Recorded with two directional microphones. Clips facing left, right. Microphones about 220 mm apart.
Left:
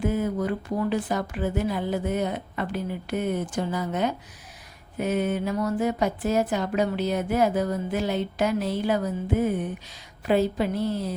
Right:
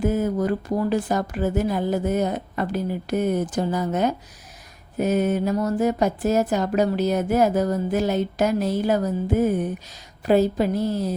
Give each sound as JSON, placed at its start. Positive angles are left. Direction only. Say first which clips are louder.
{"t": 0.0, "sound": "speech", "louder": "right 4 dB", "side_deg": -40}